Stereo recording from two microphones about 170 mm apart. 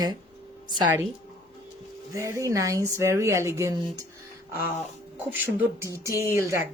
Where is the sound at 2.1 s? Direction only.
15° right (ahead or behind).